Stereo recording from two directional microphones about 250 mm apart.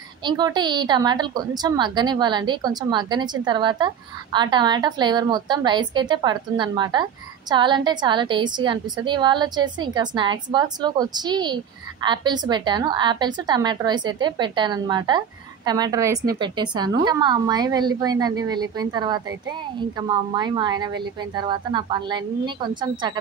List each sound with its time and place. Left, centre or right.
0.2 s a woman's voice: centre